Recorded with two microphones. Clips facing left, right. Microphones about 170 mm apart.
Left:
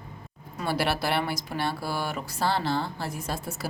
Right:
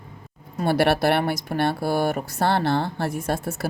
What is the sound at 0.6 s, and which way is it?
Speech, 60° right (ahead or behind).